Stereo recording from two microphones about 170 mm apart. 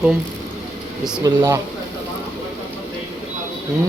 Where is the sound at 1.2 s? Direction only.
15° right (ahead or behind).